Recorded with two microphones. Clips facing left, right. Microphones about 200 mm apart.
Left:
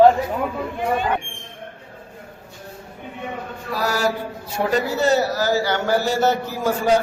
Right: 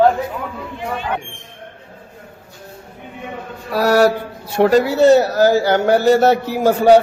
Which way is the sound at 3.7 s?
65° right (ahead or behind).